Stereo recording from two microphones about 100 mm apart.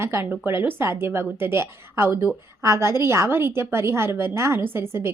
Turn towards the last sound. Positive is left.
turn(degrees=-25)  # may be behind; listen again after turning